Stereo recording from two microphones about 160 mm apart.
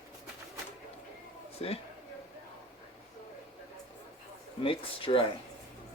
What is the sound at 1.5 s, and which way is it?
Speech, 40° left (ahead or behind).